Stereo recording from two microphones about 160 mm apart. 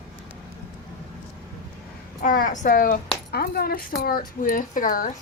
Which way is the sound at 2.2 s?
55° left (ahead or behind).